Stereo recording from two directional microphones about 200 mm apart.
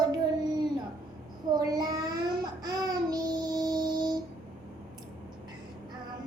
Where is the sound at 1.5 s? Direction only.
20° right (ahead or behind).